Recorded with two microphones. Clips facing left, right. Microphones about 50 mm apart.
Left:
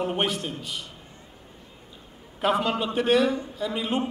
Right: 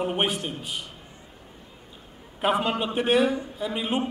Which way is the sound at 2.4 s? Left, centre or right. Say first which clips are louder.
Even; right.